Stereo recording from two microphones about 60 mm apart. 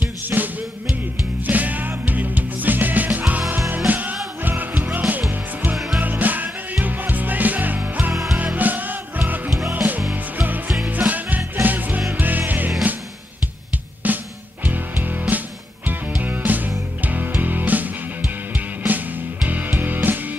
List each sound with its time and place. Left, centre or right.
0.3 s music: right
8.1 s music: centre
8.5 s music: right
14.0 s music: right